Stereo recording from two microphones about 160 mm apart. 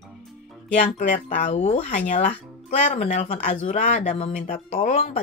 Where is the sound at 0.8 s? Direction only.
50° left (ahead or behind).